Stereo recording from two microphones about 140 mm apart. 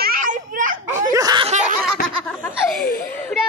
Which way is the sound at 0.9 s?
25° right (ahead or behind).